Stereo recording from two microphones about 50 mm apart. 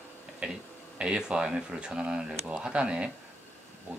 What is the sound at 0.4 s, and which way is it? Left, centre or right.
Speech, right.